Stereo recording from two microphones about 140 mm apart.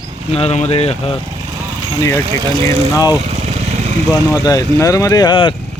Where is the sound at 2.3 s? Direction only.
40° right (ahead or behind).